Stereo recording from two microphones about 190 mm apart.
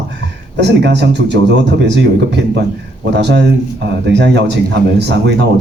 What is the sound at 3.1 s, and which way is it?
A man's voice, 65° right (ahead or behind).